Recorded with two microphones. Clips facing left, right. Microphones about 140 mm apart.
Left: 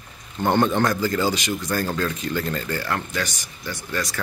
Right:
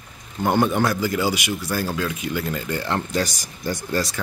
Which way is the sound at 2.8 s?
25° right (ahead or behind).